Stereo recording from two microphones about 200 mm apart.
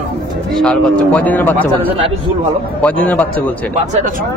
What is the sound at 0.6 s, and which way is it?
A man's voice, 5° left (ahead or behind).